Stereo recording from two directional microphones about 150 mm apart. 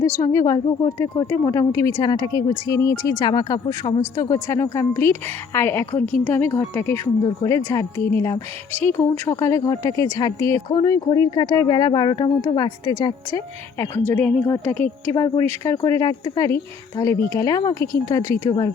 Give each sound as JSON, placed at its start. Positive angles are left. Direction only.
{"t": 0.0, "sound": "a woman's voice", "side_deg": 20}
{"t": 14.1, "sound": "a woman's voice", "side_deg": 10}